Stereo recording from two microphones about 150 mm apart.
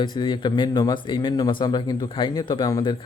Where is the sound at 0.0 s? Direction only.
30° left (ahead or behind).